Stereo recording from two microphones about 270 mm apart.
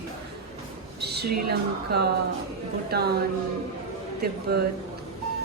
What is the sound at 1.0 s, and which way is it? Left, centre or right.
A woman's voice, right.